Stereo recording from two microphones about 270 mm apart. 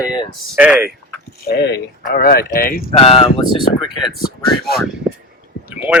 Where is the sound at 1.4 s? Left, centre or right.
Left.